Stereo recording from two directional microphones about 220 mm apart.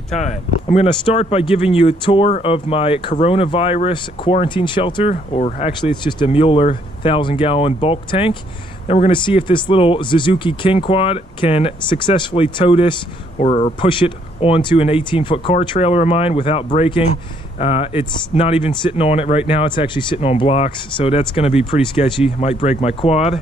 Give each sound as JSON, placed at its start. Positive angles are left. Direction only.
{"t": 0.1, "sound": "speech", "side_deg": 30}